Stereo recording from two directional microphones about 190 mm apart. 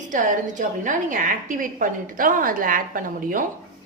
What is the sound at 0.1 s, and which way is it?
A woman's voice, 45° right (ahead or behind).